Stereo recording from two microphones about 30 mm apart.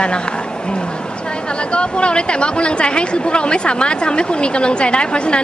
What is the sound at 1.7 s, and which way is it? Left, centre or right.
Speech, left.